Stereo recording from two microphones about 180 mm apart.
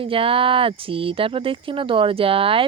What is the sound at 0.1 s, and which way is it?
Speech, 30° right (ahead or behind).